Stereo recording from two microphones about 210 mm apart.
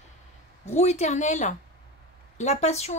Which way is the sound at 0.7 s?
30° left (ahead or behind).